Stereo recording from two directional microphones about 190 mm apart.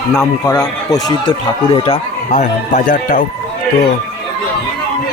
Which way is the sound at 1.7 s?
30° left (ahead or behind).